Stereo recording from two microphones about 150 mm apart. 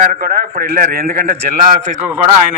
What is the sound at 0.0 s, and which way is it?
A man's voice, 55° right (ahead or behind).